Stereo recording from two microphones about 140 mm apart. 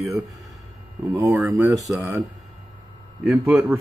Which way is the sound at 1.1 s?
15° right (ahead or behind).